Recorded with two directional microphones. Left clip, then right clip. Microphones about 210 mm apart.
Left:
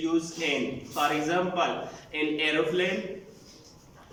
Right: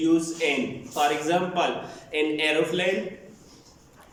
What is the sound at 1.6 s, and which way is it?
A man's voice, 20° right (ahead or behind).